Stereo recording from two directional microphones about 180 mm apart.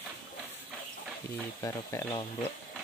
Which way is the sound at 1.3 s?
15° left (ahead or behind).